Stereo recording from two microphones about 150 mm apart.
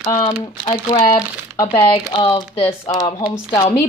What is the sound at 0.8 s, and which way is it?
Speech, 25° left (ahead or behind).